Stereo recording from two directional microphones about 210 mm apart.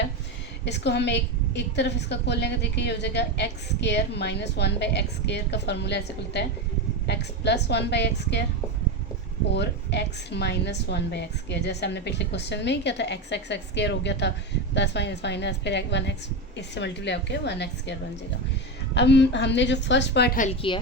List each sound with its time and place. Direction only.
0.6 s a woman's voice: 55° left (ahead or behind)
9.5 s a woman's voice: 55° left (ahead or behind)
18.9 s a woman's voice: 55° left (ahead or behind)